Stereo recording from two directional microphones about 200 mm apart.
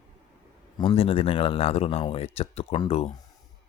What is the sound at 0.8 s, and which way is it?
Speech, 25° left (ahead or behind).